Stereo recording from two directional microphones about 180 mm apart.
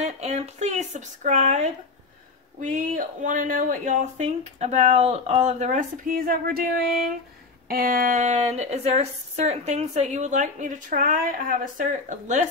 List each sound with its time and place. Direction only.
0.0 s a woman's voice: 40° right (ahead or behind)